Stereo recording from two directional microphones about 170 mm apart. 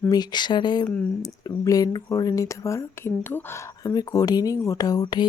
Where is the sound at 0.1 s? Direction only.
25° left (ahead or behind).